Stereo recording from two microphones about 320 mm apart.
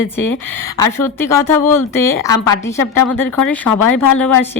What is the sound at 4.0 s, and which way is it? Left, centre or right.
Speech, centre.